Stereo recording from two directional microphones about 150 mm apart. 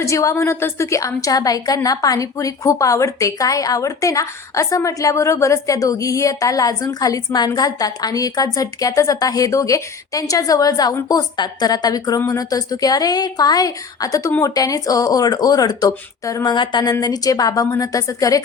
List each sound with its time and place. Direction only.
0.0 s a woman's voice: 20° left (ahead or behind)